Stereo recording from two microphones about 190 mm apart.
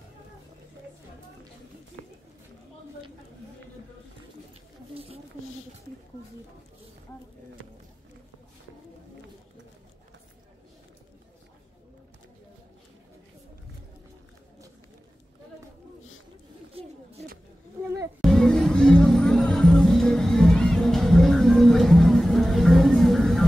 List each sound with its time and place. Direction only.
4.9 s a sound: 30° right (ahead or behind)
16.8 s pigeon: 30° right (ahead or behind)
18.2 s music: centre (ahead or behind)